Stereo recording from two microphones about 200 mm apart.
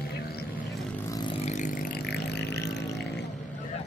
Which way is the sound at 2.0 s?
55° left (ahead or behind).